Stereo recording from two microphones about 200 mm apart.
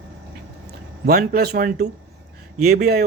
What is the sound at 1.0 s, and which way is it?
Speech, 50° right (ahead or behind).